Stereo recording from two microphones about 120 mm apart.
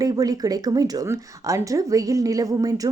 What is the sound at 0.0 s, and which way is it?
Speech, 30° right (ahead or behind).